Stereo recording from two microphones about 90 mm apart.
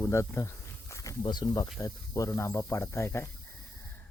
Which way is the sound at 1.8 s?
40° left (ahead or behind).